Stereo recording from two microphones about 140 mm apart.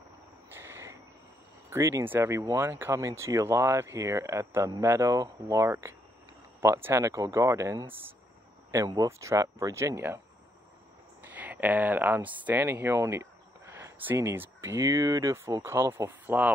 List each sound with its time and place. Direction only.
0.5 s frog: 15° right (ahead or behind)
1.7 s speech: 20° right (ahead or behind)
11.2 s speech: 10° right (ahead or behind)